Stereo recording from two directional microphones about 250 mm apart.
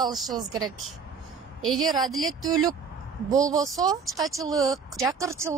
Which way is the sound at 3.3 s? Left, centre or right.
Centre.